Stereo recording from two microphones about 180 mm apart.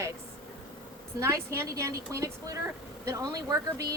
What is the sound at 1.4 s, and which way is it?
Speech, 15° right (ahead or behind).